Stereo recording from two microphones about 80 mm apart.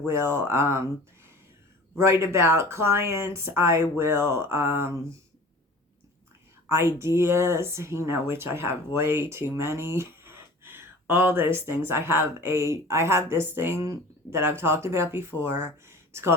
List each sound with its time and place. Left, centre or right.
0.0 s speech: right
2.0 s speech: right
6.7 s speech: right